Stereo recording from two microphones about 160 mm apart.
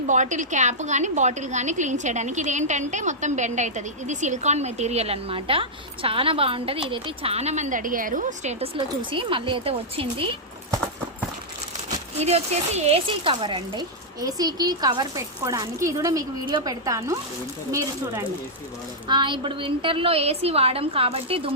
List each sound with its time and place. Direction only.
0.1 s a woman's voice: 50° right (ahead or behind)
8.6 s a woman's voice: 35° right (ahead or behind)
12.2 s speech: 40° right (ahead or behind); by 18.3 s 20° right (ahead or behind)
19.0 s a woman's voice: 30° right (ahead or behind)